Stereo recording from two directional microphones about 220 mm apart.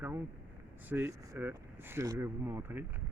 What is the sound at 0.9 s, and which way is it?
Speech, 10° right (ahead or behind).